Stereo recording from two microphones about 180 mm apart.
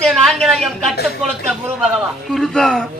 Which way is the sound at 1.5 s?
5° right (ahead or behind).